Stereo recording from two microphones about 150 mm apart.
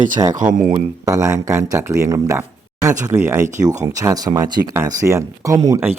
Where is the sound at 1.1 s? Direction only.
20° right (ahead or behind).